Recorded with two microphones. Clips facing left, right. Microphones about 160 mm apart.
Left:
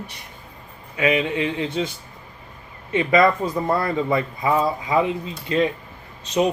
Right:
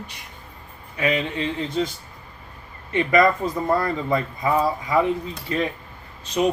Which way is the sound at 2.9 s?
20° left (ahead or behind).